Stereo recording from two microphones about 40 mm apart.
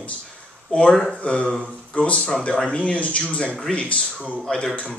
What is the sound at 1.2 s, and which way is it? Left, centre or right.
A man's voice, left.